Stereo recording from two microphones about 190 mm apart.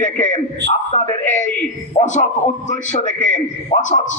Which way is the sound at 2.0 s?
40° left (ahead or behind).